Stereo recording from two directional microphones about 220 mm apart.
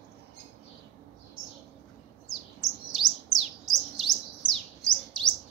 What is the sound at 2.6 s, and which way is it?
Chirp, centre (ahead or behind).